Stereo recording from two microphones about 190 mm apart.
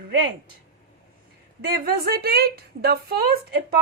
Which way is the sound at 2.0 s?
55° right (ahead or behind).